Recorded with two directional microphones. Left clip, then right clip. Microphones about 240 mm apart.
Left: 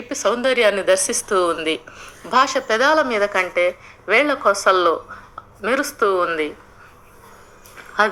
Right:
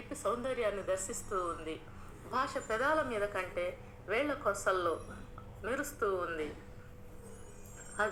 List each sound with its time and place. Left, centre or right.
0.1 s a woman's voice: left